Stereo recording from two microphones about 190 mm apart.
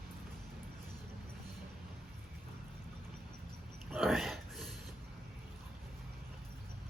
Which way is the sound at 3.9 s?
Centre (ahead or behind).